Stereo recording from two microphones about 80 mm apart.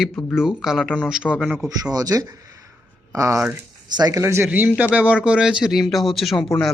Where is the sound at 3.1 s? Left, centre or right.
Right.